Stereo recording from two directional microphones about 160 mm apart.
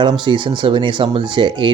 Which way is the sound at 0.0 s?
30° right (ahead or behind).